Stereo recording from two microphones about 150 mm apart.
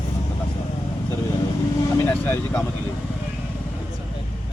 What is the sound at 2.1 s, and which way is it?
Speech, 10° left (ahead or behind).